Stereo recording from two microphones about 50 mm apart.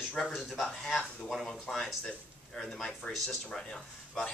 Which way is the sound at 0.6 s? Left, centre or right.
Centre.